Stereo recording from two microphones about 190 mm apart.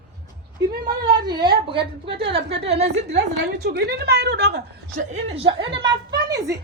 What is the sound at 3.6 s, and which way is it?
A woman's voice, 55° right (ahead or behind).